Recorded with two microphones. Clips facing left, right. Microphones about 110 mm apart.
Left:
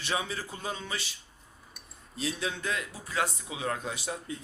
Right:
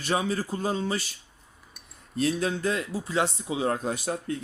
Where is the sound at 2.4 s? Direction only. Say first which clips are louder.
Right 6 dB; 35° right (ahead or behind).